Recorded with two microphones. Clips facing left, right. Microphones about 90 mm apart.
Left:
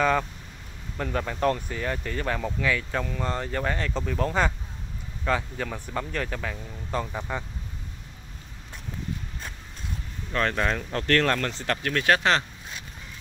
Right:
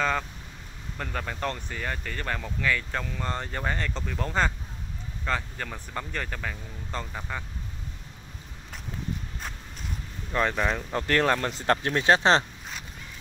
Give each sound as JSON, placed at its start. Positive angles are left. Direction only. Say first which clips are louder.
{"t": 0.9, "sound": "speech", "louder": "left 4 dB", "side_deg": 5}
{"t": 10.3, "sound": "speech", "louder": "even", "side_deg": -5}